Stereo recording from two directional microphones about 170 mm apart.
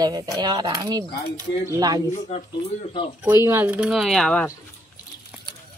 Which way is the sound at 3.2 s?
15° right (ahead or behind).